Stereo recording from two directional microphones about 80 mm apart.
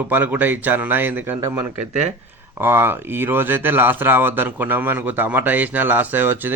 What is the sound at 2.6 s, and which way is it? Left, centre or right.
Speech, right.